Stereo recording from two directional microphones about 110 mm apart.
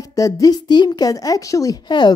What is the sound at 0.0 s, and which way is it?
Speech, 30° left (ahead or behind).